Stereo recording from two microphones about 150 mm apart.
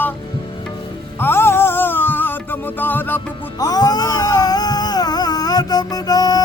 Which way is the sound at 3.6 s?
25° left (ahead or behind).